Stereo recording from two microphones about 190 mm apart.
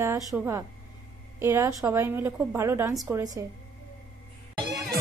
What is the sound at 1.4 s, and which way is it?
A woman's voice, 15° right (ahead or behind).